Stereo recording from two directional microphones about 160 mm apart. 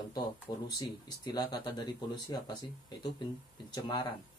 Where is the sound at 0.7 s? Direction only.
25° left (ahead or behind).